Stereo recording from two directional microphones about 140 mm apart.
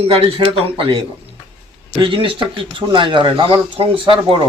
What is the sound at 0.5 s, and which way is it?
Speech, 40° right (ahead or behind).